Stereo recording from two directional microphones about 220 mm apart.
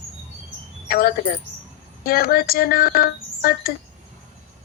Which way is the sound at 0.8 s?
40° left (ahead or behind).